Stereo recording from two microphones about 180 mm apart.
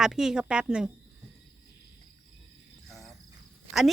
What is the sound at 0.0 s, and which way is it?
Speech, 5° right (ahead or behind).